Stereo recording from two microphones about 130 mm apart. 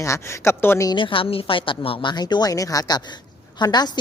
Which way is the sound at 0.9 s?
40° left (ahead or behind).